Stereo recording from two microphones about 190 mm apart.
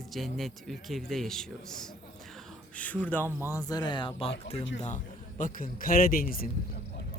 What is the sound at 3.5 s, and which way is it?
Speech, 20° left (ahead or behind).